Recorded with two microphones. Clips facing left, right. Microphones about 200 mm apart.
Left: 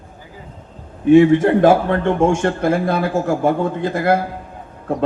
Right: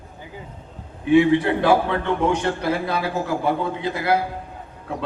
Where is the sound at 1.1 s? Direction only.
45° left (ahead or behind).